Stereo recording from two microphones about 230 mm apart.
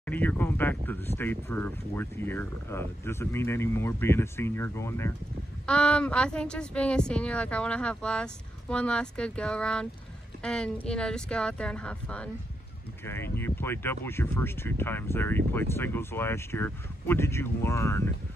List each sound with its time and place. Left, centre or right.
0.0 s a woman's voice: centre